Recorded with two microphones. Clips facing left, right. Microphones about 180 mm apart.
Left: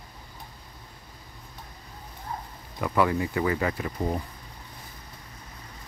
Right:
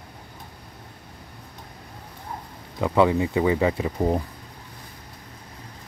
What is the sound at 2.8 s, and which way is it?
Speech, 20° right (ahead or behind).